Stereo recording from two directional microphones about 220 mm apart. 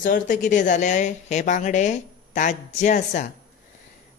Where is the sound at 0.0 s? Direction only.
35° left (ahead or behind).